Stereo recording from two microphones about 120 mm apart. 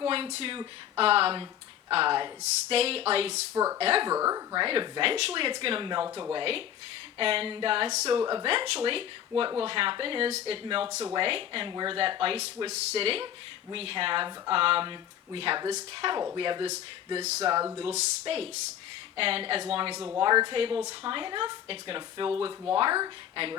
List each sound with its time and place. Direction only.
0.0 s a sound: 50° right (ahead or behind)
0.9 s speech: 55° right (ahead or behind)
2.4 s speech: 55° right (ahead or behind)
3.5 s speech: 25° right (ahead or behind)
3.8 s speech: 55° right (ahead or behind)
4.1 s speech: 30° right (ahead or behind)
4.6 s speech: 45° right (ahead or behind)
8.2 s speech: 35° right (ahead or behind)
8.4 s speech: 50° right (ahead or behind)
11.7 s speech: 35° right (ahead or behind)
11.9 s speech: 50° right (ahead or behind)